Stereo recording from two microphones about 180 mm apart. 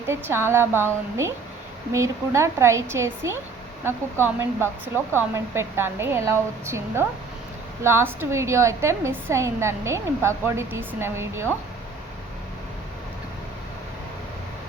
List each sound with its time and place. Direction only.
0.1 s a woman's voice: 15° right (ahead or behind)
1.9 s a woman's voice: 15° right (ahead or behind)